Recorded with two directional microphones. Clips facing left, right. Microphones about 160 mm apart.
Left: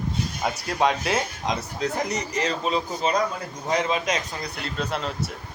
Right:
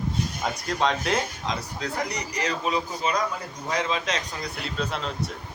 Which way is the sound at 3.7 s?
20° left (ahead or behind).